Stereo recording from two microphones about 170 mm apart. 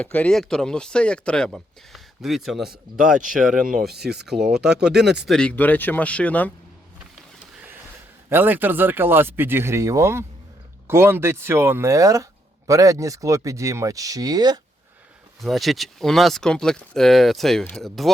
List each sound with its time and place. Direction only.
0.0 s speech: 10° left (ahead or behind)
7.5 s a sound: 10° right (ahead or behind)
8.3 s speech: 10° right (ahead or behind)
15.4 s speech: centre (ahead or behind)